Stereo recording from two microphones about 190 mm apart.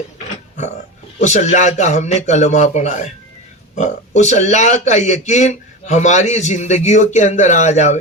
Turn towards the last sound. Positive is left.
turn(degrees=40)  # may be behind; listen again after turning